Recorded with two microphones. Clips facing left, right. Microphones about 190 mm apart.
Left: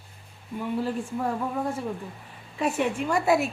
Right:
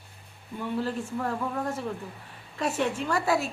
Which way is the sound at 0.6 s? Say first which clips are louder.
Left 2 dB; 10° left (ahead or behind).